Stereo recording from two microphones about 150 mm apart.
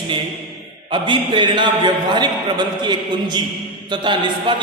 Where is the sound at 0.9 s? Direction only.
30° right (ahead or behind).